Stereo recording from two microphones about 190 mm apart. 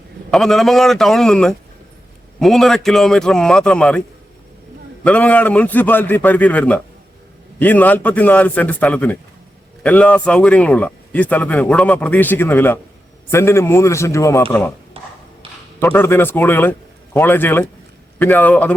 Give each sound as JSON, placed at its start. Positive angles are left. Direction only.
{"t": 0.3, "sound": "a man's voice", "side_deg": 0}
{"t": 5.0, "sound": "speech", "side_deg": 5}
{"t": 15.0, "sound": "a sound", "side_deg": -30}
{"t": 15.8, "sound": "speech", "side_deg": 10}